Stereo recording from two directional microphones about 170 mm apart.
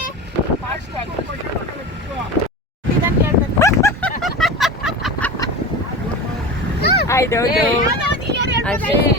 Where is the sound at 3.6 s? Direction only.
15° left (ahead or behind).